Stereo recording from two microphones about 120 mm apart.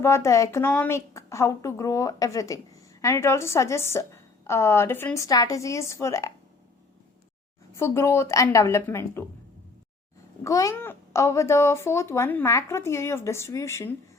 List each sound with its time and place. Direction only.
0.0 s speech: 25° left (ahead or behind)
7.8 s speech: 20° left (ahead or behind)
10.4 s speech: 25° left (ahead or behind)